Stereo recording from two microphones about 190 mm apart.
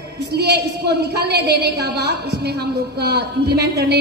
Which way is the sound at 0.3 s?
60° right (ahead or behind).